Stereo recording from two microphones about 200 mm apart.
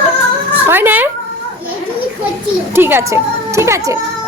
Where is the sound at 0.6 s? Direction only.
10° right (ahead or behind).